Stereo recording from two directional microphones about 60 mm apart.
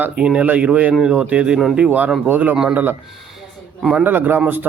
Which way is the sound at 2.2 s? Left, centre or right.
Right.